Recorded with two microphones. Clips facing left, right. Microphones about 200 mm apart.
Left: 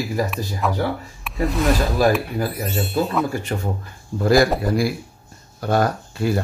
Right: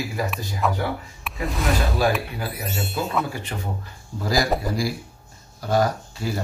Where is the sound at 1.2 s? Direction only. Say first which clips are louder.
Left 8 dB; centre (ahead or behind).